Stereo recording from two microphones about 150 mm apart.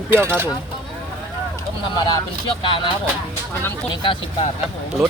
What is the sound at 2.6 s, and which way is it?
Speech, 35° left (ahead or behind).